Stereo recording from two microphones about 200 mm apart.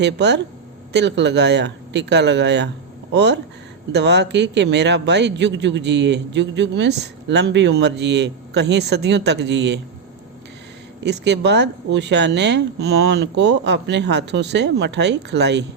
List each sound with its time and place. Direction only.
0.0 s speech: 60° right (ahead or behind)
11.0 s speech: 60° right (ahead or behind)